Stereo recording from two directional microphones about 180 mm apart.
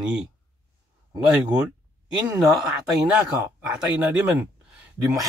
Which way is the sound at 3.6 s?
5° right (ahead or behind).